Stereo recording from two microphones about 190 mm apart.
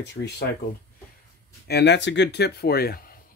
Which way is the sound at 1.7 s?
65° left (ahead or behind).